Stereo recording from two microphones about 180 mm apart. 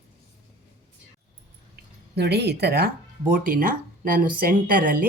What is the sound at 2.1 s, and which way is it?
Speech, 65° right (ahead or behind).